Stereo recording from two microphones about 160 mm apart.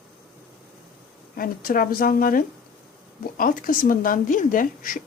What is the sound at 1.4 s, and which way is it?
A woman's voice, 60° left (ahead or behind).